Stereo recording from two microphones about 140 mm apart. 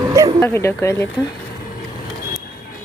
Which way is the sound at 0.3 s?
15° left (ahead or behind).